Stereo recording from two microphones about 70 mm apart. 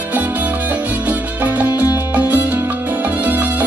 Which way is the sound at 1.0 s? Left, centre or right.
Right.